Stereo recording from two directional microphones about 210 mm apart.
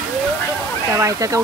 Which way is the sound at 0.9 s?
15° right (ahead or behind).